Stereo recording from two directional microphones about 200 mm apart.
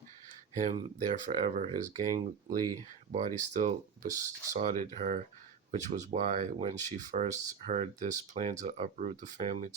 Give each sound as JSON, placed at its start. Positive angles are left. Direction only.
{"t": 0.5, "sound": "speech", "side_deg": -40}